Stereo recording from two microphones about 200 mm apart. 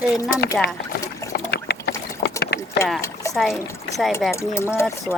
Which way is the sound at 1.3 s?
55° left (ahead or behind).